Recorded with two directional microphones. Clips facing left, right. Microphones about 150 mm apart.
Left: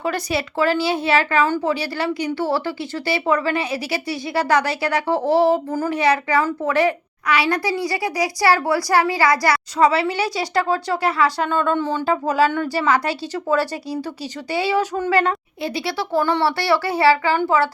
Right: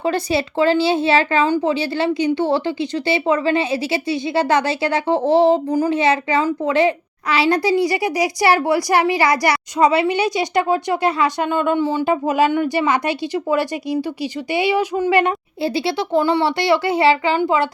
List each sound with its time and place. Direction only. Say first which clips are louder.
0.0 s speech: right 4 dB; 25° right (ahead or behind)
15.6 s speech: right 4 dB; 25° right (ahead or behind)